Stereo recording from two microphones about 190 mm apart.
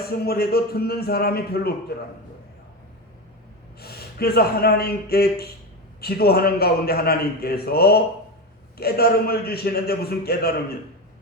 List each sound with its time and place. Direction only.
0.3 s a man's voice: 55° left (ahead or behind)
3.8 s a man's voice: 55° left (ahead or behind)